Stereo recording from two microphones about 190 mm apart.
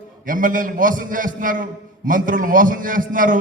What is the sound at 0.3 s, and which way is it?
A man's voice, 45° right (ahead or behind).